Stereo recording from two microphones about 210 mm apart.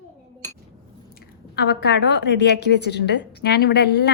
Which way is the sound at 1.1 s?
50° left (ahead or behind).